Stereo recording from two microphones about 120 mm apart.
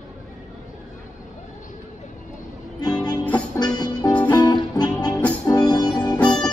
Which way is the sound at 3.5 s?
35° left (ahead or behind).